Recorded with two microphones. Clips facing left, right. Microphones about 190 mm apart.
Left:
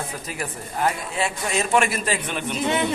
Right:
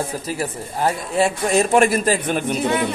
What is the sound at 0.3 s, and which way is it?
Speech, 30° right (ahead or behind).